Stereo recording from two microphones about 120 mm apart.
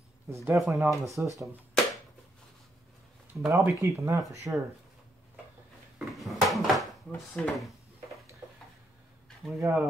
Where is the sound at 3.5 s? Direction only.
25° right (ahead or behind).